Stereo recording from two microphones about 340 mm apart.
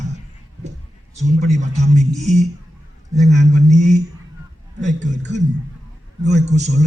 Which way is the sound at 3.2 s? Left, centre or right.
Right.